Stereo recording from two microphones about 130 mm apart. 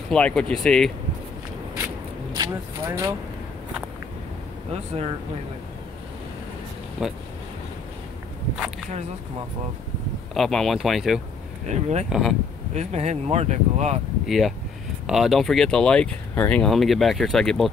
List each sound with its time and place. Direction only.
0.1 s speech: 5° left (ahead or behind)
2.3 s speech: 25° right (ahead or behind)
7.0 s speech: 5° right (ahead or behind)
10.3 s speech: centre (ahead or behind)
11.6 s speech: 60° right (ahead or behind)
12.1 s speech: centre (ahead or behind)
12.7 s speech: 60° right (ahead or behind)
14.2 s speech: centre (ahead or behind)